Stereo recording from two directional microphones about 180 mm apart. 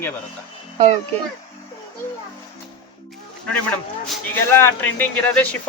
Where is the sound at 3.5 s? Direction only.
10° left (ahead or behind).